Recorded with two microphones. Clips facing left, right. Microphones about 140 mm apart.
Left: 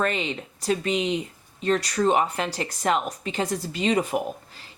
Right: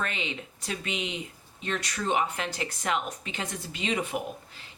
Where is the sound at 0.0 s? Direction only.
40° left (ahead or behind).